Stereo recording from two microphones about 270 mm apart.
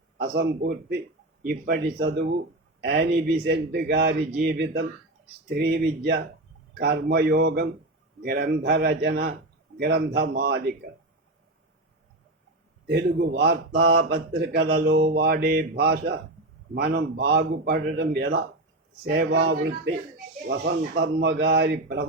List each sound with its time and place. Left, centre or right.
0.2 s speech: right
12.9 s speech: right